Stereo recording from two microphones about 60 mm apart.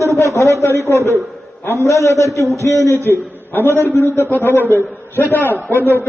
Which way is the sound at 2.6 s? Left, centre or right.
Left.